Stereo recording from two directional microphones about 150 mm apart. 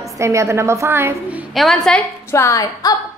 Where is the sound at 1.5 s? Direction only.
Centre (ahead or behind).